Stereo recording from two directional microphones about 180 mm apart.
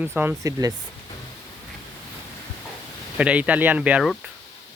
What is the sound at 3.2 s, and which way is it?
Speech, 5° right (ahead or behind).